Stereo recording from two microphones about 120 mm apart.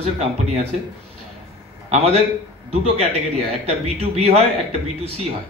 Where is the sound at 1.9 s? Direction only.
60° right (ahead or behind).